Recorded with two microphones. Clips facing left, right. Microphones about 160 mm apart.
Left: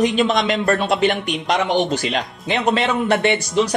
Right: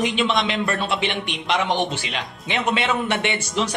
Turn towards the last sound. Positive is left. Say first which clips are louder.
# left 6 dB
turn(degrees=40)  # may be behind; listen again after turning